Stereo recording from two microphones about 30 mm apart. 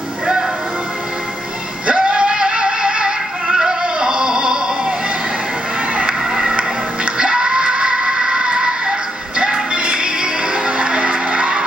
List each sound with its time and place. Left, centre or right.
2.0 s music: right
3.4 s a sound: centre
6.0 s music: centre
7.2 s music: right